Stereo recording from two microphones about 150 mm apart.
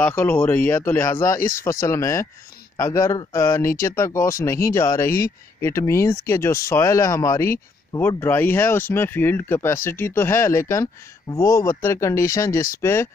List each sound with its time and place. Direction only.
0.0 s speech: 10° left (ahead or behind)